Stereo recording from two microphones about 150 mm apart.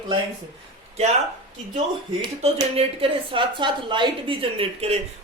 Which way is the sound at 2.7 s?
35° right (ahead or behind).